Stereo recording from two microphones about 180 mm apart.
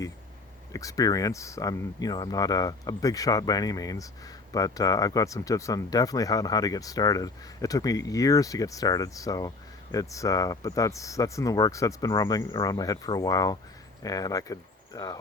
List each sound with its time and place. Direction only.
0.7 s speech: 20° left (ahead or behind)